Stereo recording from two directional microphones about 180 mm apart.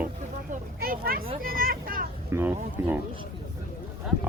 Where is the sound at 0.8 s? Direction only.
55° right (ahead or behind).